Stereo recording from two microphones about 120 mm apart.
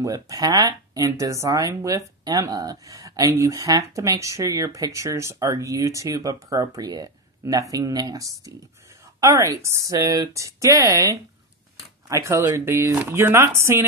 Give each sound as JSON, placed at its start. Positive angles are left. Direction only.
{"t": 0.0, "sound": "speech", "side_deg": -30}